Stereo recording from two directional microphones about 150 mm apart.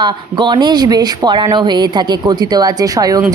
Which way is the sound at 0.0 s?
30° right (ahead or behind).